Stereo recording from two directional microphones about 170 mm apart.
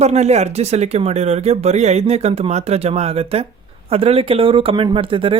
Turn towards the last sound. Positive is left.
turn(degrees=-30)  # may be behind; listen again after turning